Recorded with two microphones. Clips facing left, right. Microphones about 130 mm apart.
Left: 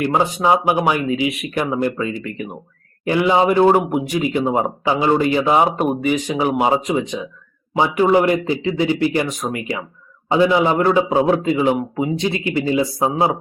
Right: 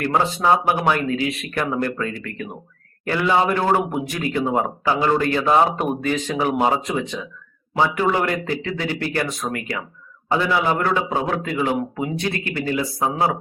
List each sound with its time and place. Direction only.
0.0 s a man's voice: 15° left (ahead or behind)